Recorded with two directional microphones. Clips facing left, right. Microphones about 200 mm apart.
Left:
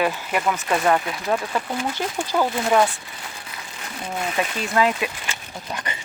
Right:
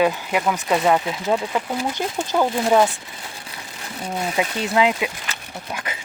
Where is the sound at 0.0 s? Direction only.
15° right (ahead or behind).